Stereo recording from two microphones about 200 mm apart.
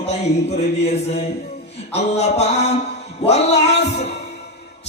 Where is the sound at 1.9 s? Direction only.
35° left (ahead or behind).